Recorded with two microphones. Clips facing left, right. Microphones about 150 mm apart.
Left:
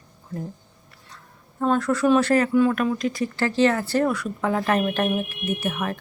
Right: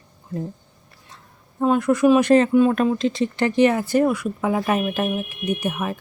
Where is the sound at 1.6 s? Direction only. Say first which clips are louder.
Right 4 dB; 10° right (ahead or behind).